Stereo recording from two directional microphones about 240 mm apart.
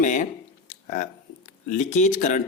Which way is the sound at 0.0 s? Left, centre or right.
Left.